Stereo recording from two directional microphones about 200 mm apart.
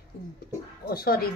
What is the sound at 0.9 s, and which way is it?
Speech, 50° left (ahead or behind).